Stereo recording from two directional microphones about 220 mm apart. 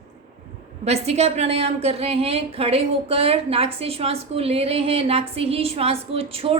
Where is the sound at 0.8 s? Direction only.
30° right (ahead or behind).